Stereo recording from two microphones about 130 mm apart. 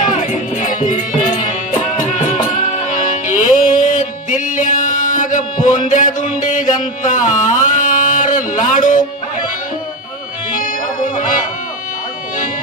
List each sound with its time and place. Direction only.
0.1 s music: 80° left
10.5 s music: 90° left